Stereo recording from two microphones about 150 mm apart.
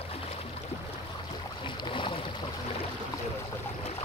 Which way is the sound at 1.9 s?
35° left (ahead or behind).